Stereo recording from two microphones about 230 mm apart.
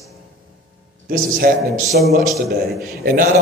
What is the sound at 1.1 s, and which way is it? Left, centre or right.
A man's voice, right.